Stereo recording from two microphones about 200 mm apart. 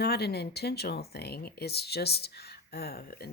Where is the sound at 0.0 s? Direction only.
55° left (ahead or behind).